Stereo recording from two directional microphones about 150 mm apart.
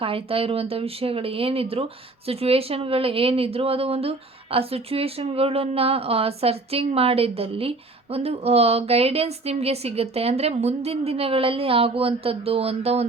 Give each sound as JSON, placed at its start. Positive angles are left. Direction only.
{"t": 0.0, "sound": "speech", "side_deg": -40}